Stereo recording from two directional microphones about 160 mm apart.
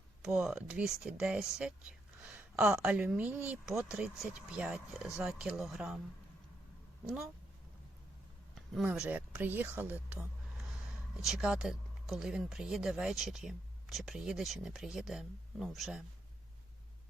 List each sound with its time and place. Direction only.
0.2 s speech: 5° right (ahead or behind)
2.2 s a sound: 10° right (ahead or behind)
2.8 s speech: 5° right (ahead or behind)
8.5 s speech: centre (ahead or behind)